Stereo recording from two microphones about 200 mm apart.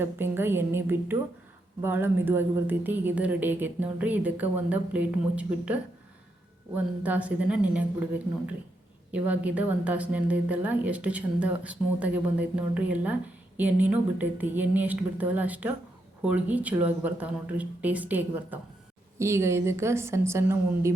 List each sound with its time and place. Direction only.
0.0 s a woman's voice: 10° right (ahead or behind)
9.1 s a woman's voice: 5° right (ahead or behind)